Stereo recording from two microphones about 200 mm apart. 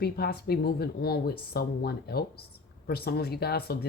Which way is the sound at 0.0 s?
50° left (ahead or behind).